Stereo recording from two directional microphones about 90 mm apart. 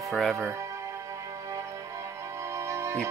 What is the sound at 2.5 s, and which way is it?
Music, 30° right (ahead or behind).